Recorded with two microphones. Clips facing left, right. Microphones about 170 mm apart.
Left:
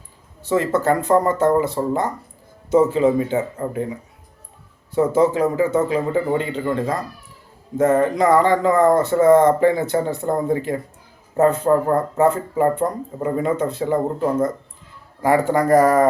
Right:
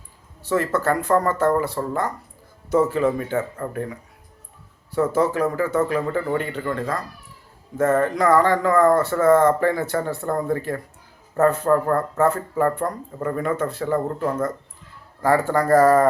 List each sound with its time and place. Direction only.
0.4 s speech: 20° left (ahead or behind)
4.9 s speech: 20° left (ahead or behind)